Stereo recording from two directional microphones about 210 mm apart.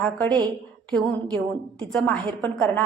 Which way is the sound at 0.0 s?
5° left (ahead or behind).